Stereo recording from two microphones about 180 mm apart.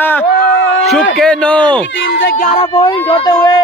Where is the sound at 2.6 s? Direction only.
25° left (ahead or behind).